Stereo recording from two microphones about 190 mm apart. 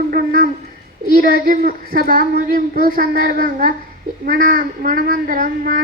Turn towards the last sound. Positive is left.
turn(degrees=-45)  # may be behind; listen again after turning